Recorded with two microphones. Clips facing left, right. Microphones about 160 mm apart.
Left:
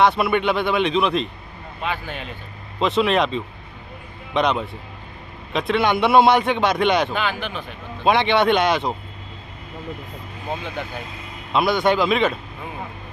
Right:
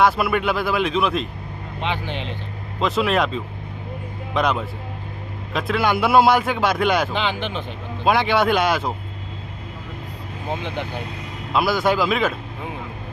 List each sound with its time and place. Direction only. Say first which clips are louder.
0.0 s speech: left 1 dB; centre (ahead or behind)
1.8 s speech: right 1 dB; 20° right (ahead or behind)
2.8 s speech: left 1 dB; centre (ahead or behind)
7.1 s speech: right 1 dB; 20° right (ahead or behind)
8.0 s speech: left 1 dB; centre (ahead or behind)
10.5 s speech: right 1 dB; 20° right (ahead or behind)
11.5 s speech: left 1 dB; centre (ahead or behind)